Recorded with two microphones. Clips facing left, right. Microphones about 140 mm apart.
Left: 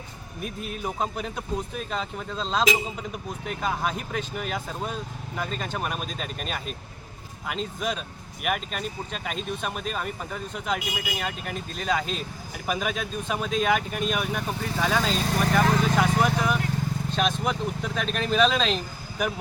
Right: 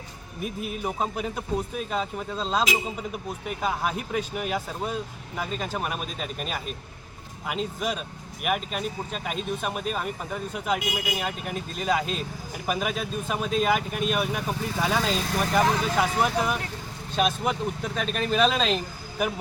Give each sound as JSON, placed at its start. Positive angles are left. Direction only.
{"t": 0.4, "sound": "a man's voice", "side_deg": -5}
{"t": 17.2, "sound": "speech", "side_deg": -5}